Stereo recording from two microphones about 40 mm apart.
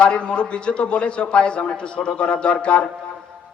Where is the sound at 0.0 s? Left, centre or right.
Left.